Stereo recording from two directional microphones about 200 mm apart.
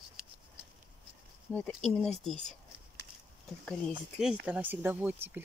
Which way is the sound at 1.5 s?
5° left (ahead or behind).